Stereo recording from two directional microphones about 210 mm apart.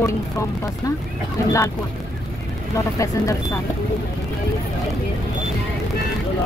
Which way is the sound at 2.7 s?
15° left (ahead or behind).